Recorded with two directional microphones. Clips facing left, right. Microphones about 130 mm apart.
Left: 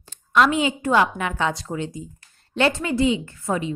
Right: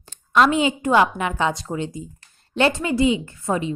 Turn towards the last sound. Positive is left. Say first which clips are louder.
# right 1 dB
turn(degrees=-25)  # may be behind; listen again after turning